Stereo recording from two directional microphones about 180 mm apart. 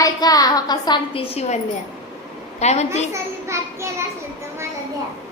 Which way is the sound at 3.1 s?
15° right (ahead or behind).